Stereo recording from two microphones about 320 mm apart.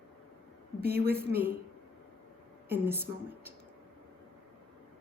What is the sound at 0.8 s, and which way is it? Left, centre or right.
Speech, right.